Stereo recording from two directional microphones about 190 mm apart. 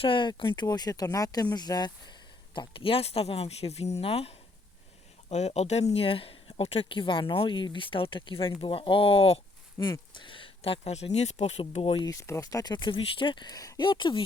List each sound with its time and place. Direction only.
0.0 s speech: 25° left (ahead or behind)
9.7 s speech: 20° left (ahead or behind)
12.2 s speech: 15° left (ahead or behind)